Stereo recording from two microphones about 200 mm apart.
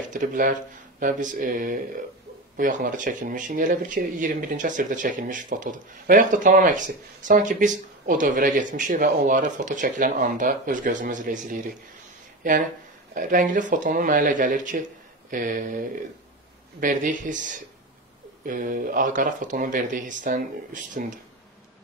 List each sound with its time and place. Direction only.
0.1 s speech: 40° right (ahead or behind)
13.1 s speech: 40° right (ahead or behind)
16.8 s speech: 40° right (ahead or behind)